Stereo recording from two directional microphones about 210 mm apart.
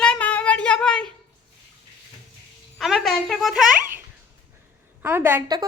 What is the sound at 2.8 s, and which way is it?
A child's voice, centre (ahead or behind).